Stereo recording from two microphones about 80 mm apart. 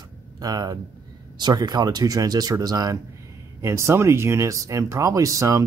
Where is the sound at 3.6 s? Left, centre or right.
Right.